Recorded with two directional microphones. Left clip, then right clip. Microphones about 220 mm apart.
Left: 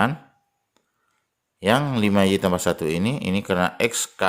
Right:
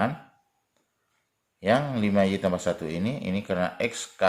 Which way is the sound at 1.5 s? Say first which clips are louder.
Left 3 dB; 45° left (ahead or behind).